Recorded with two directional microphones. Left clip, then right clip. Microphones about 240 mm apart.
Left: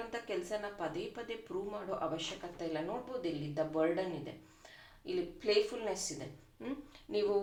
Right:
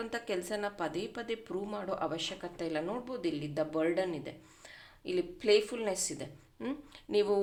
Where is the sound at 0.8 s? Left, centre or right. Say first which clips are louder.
Right 3 dB; right.